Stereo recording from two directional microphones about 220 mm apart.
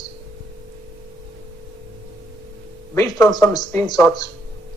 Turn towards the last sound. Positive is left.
turn(degrees=15)  # may be behind; listen again after turning